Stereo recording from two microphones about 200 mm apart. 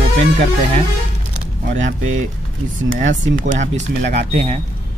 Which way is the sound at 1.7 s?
40° right (ahead or behind).